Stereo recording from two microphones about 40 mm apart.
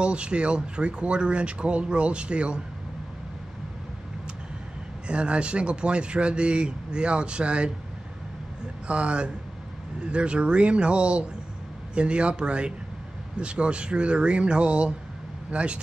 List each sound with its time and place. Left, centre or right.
0.0 s speech: right
5.0 s speech: right
8.8 s speech: right